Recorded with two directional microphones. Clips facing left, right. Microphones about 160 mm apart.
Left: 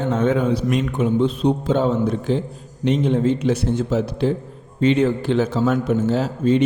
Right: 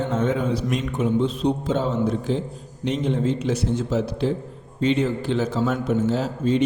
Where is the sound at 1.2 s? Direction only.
60° left (ahead or behind).